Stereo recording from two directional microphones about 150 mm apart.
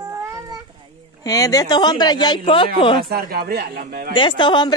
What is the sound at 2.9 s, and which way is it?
Speech, 85° right.